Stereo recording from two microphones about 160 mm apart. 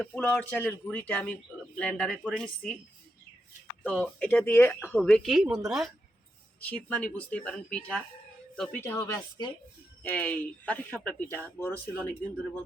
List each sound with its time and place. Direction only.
0.0 s speech: 10° left (ahead or behind)
3.8 s speech: 5° left (ahead or behind)
4.9 s speech: centre (ahead or behind)
6.6 s speech: 10° left (ahead or behind)
8.8 s speech: 15° left (ahead or behind)
10.0 s speech: 10° left (ahead or behind)